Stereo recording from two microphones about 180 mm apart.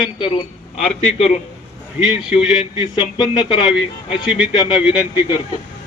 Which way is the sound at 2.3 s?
5° right (ahead or behind).